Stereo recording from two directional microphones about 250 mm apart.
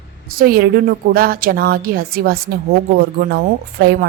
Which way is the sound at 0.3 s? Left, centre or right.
Right.